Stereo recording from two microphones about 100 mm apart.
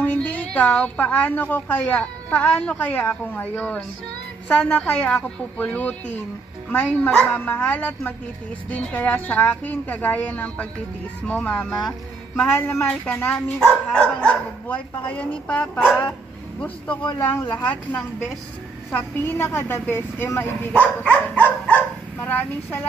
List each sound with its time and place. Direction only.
0.0 s a woman's voice: 15° left (ahead or behind)
20.7 s a woman's voice: 10° left (ahead or behind)